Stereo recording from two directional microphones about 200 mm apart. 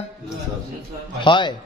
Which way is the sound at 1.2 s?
25° left (ahead or behind).